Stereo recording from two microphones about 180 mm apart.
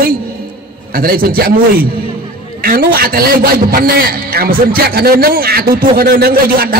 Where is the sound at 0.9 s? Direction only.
55° right (ahead or behind).